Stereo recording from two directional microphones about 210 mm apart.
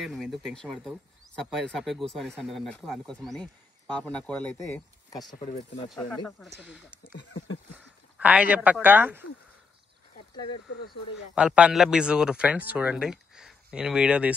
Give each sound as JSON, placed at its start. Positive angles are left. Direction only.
{"t": 0.0, "sound": "speech", "side_deg": 0}
{"t": 5.3, "sound": "speech", "side_deg": 35}
{"t": 5.9, "sound": "speech", "side_deg": 5}
{"t": 10.3, "sound": "speech", "side_deg": 20}
{"t": 11.3, "sound": "speech", "side_deg": -5}